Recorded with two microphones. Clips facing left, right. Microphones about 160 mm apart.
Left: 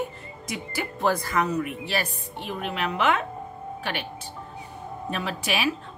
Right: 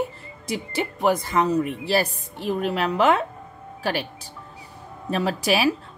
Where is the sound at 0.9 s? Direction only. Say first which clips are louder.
Right 3 dB; 15° right (ahead or behind); by 3.2 s 35° right (ahead or behind).